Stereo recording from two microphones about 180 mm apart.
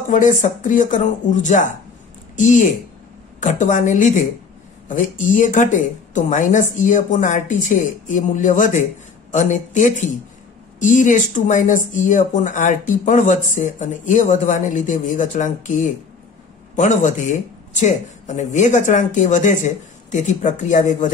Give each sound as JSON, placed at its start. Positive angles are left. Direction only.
{"t": 0.1, "sound": "speech", "side_deg": 45}